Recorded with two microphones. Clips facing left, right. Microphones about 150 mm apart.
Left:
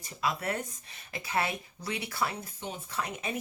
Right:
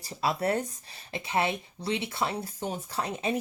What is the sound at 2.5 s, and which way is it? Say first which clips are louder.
Speech: right 6 dB; 40° right (ahead or behind).